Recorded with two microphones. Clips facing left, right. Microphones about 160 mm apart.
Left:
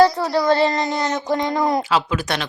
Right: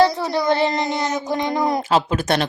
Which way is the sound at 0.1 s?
20° right (ahead or behind).